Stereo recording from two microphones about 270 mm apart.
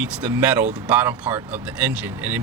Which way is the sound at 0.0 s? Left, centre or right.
Centre.